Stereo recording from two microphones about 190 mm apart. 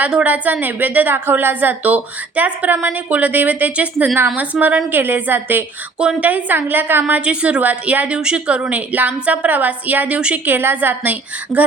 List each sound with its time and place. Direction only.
0.0 s a woman's voice: 5° right (ahead or behind)